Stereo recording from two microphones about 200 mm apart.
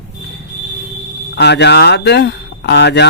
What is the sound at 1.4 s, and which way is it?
Speech, 60° left (ahead or behind).